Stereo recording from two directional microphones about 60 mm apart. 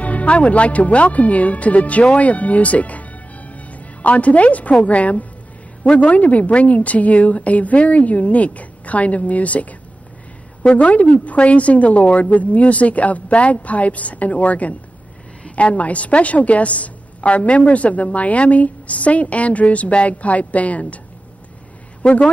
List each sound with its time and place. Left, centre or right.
0.0 s a woman's voice: left
10.6 s a woman's voice: centre
10.9 s a woman's voice: left
22.0 s speech: centre